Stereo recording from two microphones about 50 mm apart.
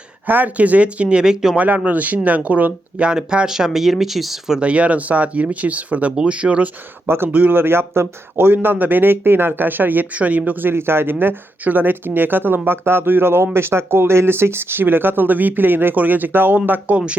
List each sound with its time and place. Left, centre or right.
0.3 s speech: right; by 1.5 s centre
1.5 s speech: right
3.0 s speech: centre
4.6 s speech: right
7.1 s speech: right